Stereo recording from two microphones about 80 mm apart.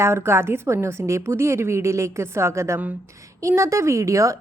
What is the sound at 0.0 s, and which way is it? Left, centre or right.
A woman's voice, right.